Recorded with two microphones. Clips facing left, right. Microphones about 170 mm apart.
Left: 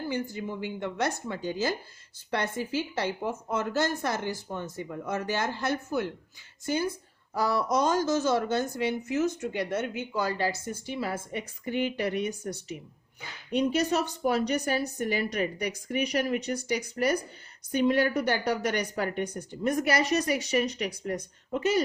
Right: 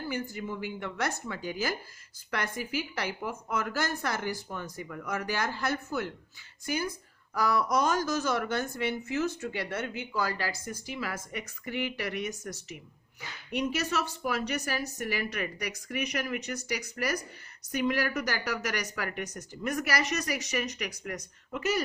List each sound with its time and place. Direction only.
0.0 s a woman's voice: 20° left (ahead or behind)